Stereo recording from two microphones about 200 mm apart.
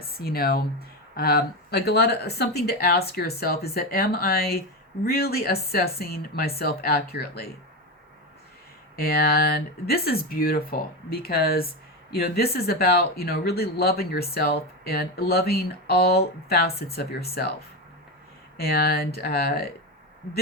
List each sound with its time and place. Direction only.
0.0 s speech: 50° left (ahead or behind)
9.0 s speech: 50° left (ahead or behind)
18.5 s speech: 50° left (ahead or behind)